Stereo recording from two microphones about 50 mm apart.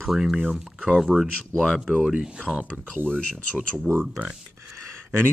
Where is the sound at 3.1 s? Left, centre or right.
Centre.